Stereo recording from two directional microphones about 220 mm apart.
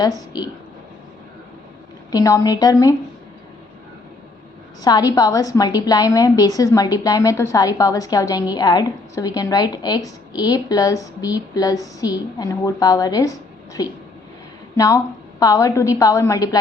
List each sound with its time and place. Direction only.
2.1 s a woman's voice: 15° left (ahead or behind)
4.8 s a woman's voice: 20° left (ahead or behind)